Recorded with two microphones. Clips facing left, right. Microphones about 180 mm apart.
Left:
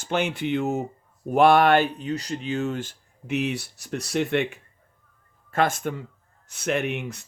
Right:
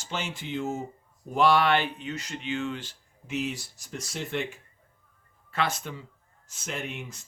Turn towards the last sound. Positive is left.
turn(degrees=65)  # may be behind; listen again after turning